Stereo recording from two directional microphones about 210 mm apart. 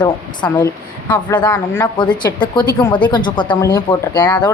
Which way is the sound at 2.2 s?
20° left (ahead or behind).